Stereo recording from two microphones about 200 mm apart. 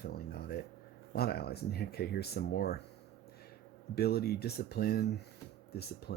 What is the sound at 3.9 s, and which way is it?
Speech, 50° left (ahead or behind).